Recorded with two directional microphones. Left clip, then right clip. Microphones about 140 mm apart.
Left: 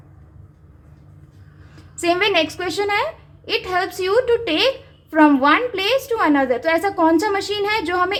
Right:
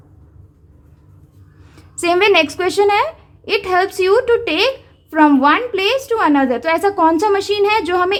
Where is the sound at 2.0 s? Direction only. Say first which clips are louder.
Right 5 dB; 40° right (ahead or behind).